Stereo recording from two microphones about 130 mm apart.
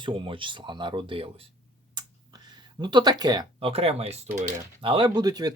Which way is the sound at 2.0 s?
35° right (ahead or behind).